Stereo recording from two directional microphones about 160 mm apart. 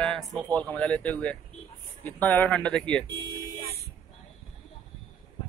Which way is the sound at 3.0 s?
30° right (ahead or behind).